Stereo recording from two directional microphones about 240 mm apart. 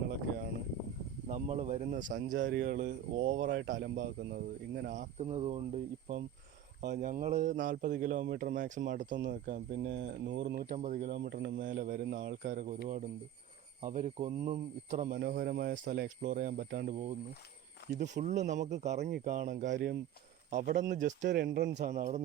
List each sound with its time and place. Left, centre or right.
1.3 s speech: right
4.9 s speech: right
9.1 s speech: right
18.0 s speech: right
21.7 s speech: right